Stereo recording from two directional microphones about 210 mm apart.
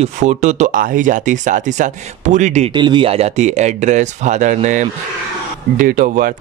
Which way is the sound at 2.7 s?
20° right (ahead or behind).